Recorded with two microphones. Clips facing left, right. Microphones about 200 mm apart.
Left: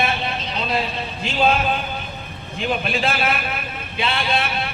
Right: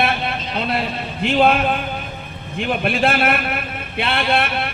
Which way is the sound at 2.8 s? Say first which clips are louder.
Right 4 dB; 55° right (ahead or behind).